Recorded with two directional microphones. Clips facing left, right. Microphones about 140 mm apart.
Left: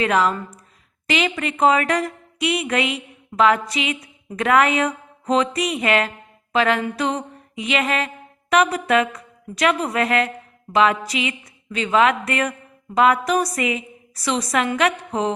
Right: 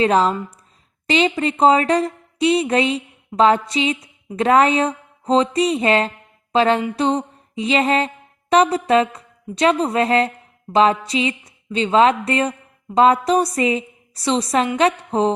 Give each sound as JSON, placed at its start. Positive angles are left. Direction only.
{"t": 0.0, "sound": "speech", "side_deg": -30}
{"t": 6.5, "sound": "a sound", "side_deg": -30}
{"t": 6.9, "sound": "music", "side_deg": -30}
{"t": 13.6, "sound": "a woman's voice", "side_deg": -30}